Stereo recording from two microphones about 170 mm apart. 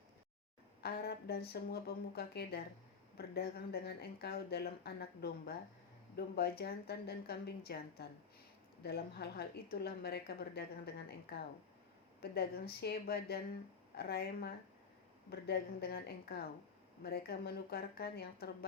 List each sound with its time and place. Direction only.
0.8 s speech: 70° left (ahead or behind)